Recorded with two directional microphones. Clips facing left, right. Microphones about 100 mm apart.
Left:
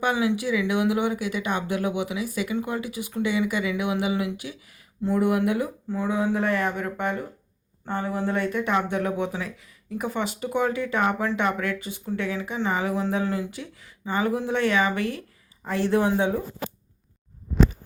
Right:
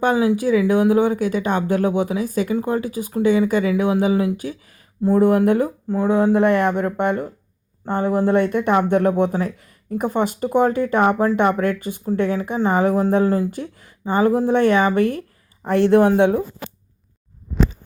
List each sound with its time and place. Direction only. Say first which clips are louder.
0.0 s speech: right 6 dB; 40° right (ahead or behind)
15.6 s speech: right 8 dB; 60° right (ahead or behind)